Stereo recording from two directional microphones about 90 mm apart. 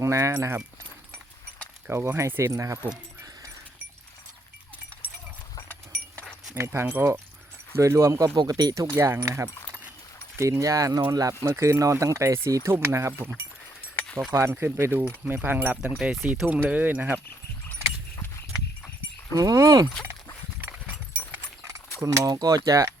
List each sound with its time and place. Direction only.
0.0 s speech: 35° right (ahead or behind)
1.9 s speech: 25° right (ahead or behind)
6.6 s speech: 30° right (ahead or behind)
8.4 s speech: 50° right (ahead or behind)
14.8 s speech: 25° right (ahead or behind)
19.3 s speech: 40° right (ahead or behind)
20.7 s a sound: 15° right (ahead or behind)
22.0 s speech: 40° right (ahead or behind)